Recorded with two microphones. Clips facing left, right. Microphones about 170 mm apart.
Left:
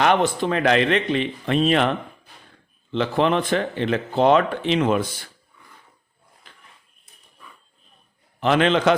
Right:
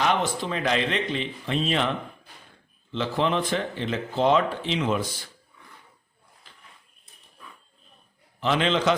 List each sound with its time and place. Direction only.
0.0 s speech: 60° left (ahead or behind)
8.4 s speech: 60° left (ahead or behind)